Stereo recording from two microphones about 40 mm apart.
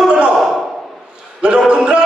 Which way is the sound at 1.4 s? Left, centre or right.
Right.